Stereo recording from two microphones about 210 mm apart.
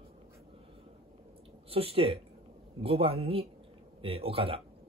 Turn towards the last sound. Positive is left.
turn(degrees=-25)  # may be behind; listen again after turning